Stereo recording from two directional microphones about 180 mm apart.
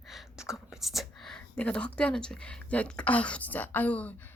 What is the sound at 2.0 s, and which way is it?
Speech, 5° left (ahead or behind).